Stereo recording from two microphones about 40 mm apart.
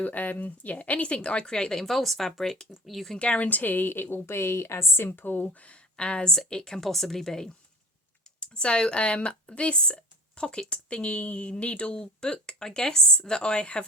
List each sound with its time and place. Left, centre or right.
0.0 s speech: left; by 3.1 s centre
3.2 s a woman's voice: left
5.5 s speech: left
6.5 s speech: centre
8.4 s speech: left